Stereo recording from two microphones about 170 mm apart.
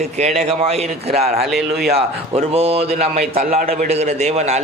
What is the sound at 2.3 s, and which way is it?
A man's voice, 35° right (ahead or behind).